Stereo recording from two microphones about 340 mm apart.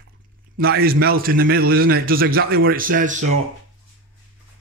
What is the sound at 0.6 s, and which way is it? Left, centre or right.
A man's voice, right.